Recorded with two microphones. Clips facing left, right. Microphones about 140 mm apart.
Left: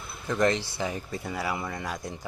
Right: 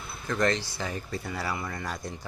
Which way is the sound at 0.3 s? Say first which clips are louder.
Left 2 dB; 15° left (ahead or behind).